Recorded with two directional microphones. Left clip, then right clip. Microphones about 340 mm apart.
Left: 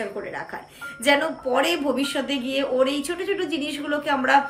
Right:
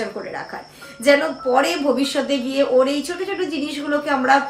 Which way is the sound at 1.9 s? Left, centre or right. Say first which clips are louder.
Right 5 dB; centre.